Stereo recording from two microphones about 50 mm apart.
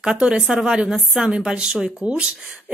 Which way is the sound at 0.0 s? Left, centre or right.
Centre.